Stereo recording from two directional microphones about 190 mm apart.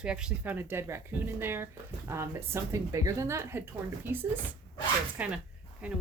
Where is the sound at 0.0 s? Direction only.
5° right (ahead or behind).